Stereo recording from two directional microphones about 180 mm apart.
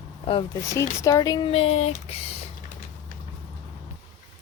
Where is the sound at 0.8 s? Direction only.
20° left (ahead or behind); by 2.1 s 35° left (ahead or behind).